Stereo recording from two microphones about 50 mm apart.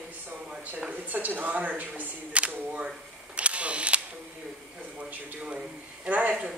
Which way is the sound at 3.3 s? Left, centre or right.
Right.